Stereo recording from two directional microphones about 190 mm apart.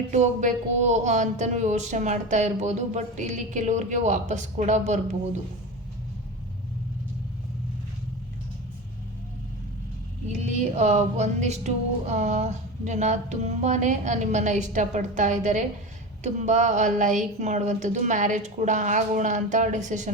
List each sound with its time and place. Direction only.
0.1 s speech: 40° right (ahead or behind)
10.8 s speech: 35° right (ahead or behind)